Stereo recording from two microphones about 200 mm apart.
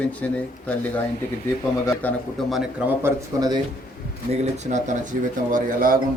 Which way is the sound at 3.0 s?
15° right (ahead or behind).